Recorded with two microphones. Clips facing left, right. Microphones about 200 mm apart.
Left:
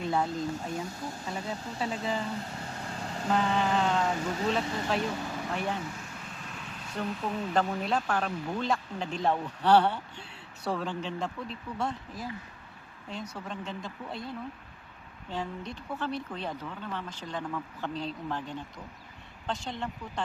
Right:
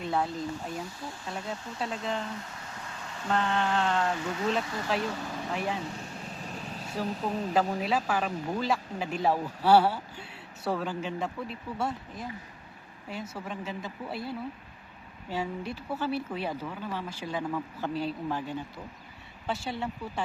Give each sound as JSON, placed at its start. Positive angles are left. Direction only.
{"t": 0.0, "sound": "speech", "side_deg": 0}
{"t": 2.4, "sound": "vehicle", "side_deg": 30}
{"t": 3.2, "sound": "speech", "side_deg": 5}
{"t": 6.1, "sound": "vehicle", "side_deg": -35}
{"t": 7.1, "sound": "speech", "side_deg": -35}
{"t": 7.5, "sound": "speech", "side_deg": -5}